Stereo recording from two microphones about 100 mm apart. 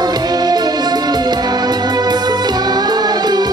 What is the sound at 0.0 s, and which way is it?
Music, 45° right (ahead or behind).